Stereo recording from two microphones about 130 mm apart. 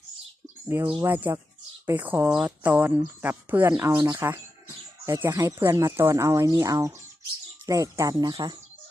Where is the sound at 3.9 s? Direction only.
25° right (ahead or behind).